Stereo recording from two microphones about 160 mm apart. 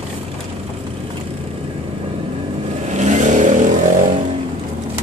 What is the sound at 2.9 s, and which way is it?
Vehicle, 50° right (ahead or behind).